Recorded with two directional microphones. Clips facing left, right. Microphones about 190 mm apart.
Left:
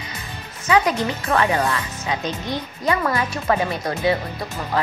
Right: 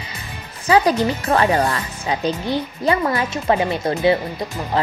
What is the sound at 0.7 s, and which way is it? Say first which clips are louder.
A woman's voice: right 3 dB; 35° right (ahead or behind).